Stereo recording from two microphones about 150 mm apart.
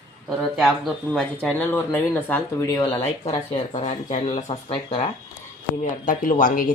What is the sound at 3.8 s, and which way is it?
Speech, 55° left (ahead or behind).